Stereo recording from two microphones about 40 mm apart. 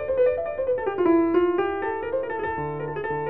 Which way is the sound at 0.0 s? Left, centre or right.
Centre.